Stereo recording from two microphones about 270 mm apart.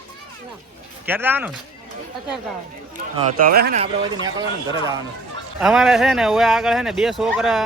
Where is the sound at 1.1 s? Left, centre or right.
Centre.